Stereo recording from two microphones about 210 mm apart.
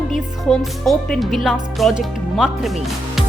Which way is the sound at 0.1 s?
Centre (ahead or behind).